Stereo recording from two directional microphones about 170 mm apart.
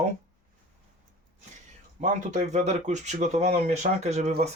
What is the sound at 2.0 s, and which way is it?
Speech, 45° right (ahead or behind).